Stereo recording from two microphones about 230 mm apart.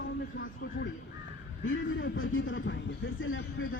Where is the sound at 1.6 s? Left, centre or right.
Left.